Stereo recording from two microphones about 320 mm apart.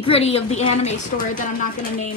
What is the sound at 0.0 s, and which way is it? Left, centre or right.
A woman's voice, centre.